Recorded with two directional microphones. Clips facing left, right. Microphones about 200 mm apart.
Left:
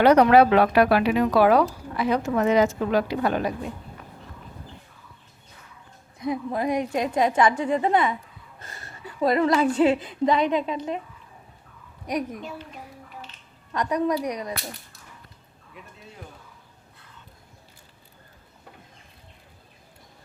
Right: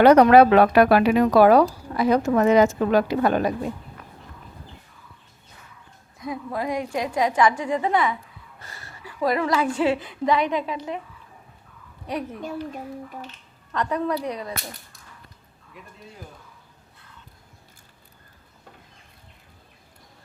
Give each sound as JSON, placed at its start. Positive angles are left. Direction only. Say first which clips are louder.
{"t": 0.0, "sound": "speech", "louder": "right 3 dB", "side_deg": -50}
{"t": 6.2, "sound": "a woman's voice", "louder": "left 3 dB", "side_deg": 20}
{"t": 12.0, "sound": "speech", "louder": "left 2 dB", "side_deg": 15}
{"t": 13.7, "sound": "speech", "louder": "left 1 dB", "side_deg": 15}